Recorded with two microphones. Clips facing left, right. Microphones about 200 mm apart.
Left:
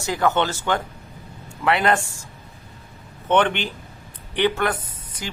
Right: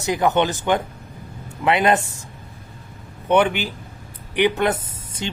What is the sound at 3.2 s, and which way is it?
Speech, 10° right (ahead or behind).